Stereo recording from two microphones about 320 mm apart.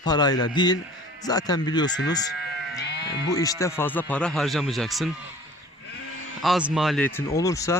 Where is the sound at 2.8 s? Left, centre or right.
Left.